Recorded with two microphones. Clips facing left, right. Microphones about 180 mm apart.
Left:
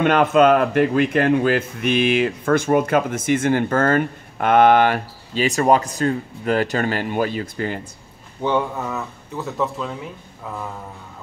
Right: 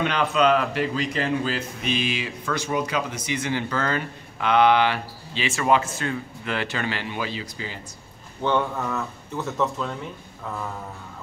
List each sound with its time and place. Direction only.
0.0 s a man's voice: 50° left (ahead or behind)
8.4 s speech: 10° left (ahead or behind)